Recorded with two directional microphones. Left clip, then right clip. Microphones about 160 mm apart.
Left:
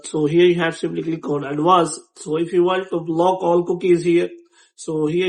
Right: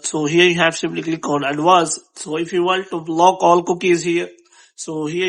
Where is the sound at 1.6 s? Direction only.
30° right (ahead or behind).